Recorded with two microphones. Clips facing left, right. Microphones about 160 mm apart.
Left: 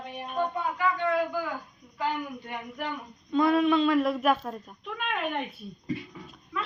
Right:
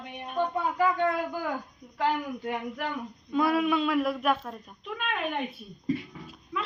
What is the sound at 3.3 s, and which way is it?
A woman's voice, 5° right (ahead or behind).